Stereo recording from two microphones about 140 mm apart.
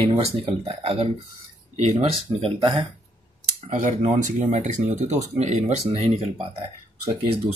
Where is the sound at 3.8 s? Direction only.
60° right (ahead or behind).